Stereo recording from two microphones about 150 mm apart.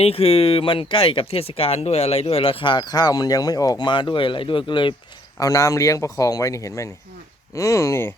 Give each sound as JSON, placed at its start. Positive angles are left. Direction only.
{"t": 0.0, "sound": "speech", "side_deg": 40}
{"t": 5.4, "sound": "speech", "side_deg": 20}